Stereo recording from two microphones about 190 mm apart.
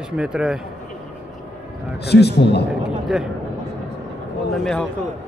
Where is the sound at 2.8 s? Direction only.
5° right (ahead or behind).